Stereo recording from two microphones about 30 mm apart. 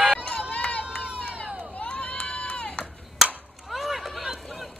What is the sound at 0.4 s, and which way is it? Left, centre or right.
Run, left.